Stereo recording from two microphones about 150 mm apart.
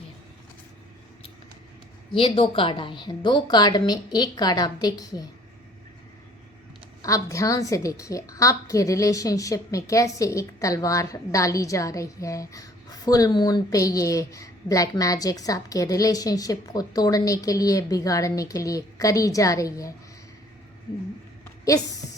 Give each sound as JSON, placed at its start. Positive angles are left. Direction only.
{"t": 2.1, "sound": "a woman's voice", "side_deg": 35}
{"t": 7.0, "sound": "a woman's voice", "side_deg": 20}
{"t": 21.6, "sound": "speech", "side_deg": 20}